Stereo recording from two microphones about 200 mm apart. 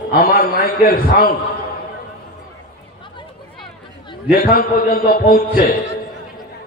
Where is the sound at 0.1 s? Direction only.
45° left (ahead or behind).